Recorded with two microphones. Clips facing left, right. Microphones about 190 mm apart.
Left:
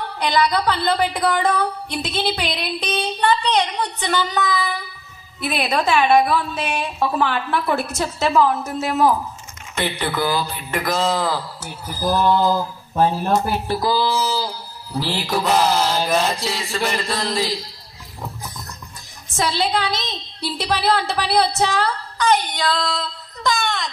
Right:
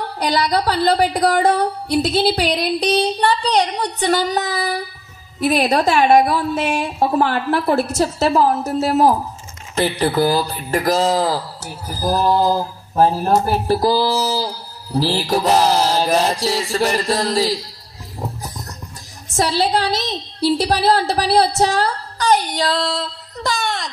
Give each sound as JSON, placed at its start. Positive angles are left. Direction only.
{"t": 0.2, "sound": "speech", "side_deg": -40}
{"t": 19.3, "sound": "speech", "side_deg": -35}